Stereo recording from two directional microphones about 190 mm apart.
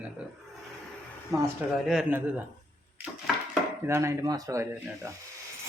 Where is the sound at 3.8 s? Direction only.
15° right (ahead or behind).